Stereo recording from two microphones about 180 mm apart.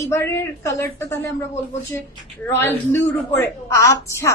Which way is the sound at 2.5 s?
15° left (ahead or behind).